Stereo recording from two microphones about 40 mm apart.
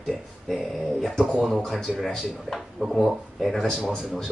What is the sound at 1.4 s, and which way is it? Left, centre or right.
Speech, centre.